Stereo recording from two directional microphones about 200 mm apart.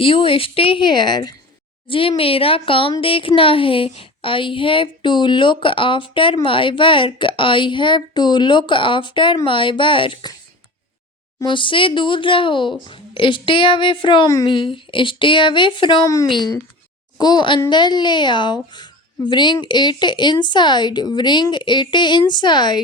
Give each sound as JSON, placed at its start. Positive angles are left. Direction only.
{"t": 0.0, "sound": "speech", "side_deg": 25}
{"t": 11.3, "sound": "speech", "side_deg": 25}